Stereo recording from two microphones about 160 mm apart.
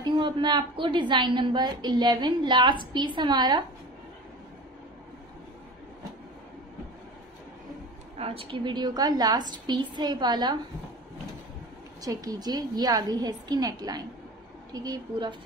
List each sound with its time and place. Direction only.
0.0 s a woman's voice: 30° right (ahead or behind)
8.2 s a woman's voice: 35° right (ahead or behind)
12.0 s a woman's voice: 20° right (ahead or behind)